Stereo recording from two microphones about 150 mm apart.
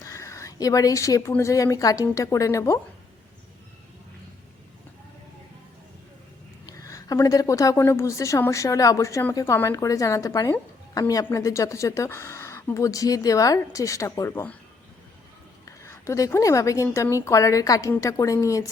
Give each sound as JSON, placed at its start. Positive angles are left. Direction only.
{"t": 0.0, "sound": "a sound", "side_deg": 20}
{"t": 1.4, "sound": "speech", "side_deg": 20}
{"t": 6.7, "sound": "speech", "side_deg": 25}
{"t": 15.6, "sound": "speech", "side_deg": 20}